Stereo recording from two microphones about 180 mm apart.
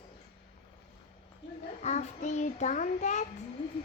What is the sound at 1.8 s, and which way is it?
A child's voice, 40° left (ahead or behind).